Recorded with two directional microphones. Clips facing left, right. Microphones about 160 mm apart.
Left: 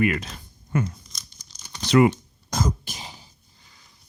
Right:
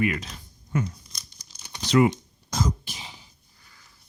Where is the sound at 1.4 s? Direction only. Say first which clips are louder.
Even; 10° right (ahead or behind).